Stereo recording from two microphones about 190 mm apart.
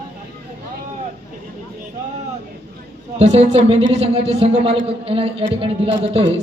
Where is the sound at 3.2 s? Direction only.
35° right (ahead or behind).